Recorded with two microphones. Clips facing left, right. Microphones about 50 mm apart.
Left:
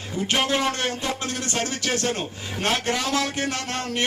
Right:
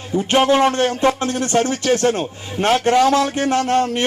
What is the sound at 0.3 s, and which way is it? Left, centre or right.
Speech, right.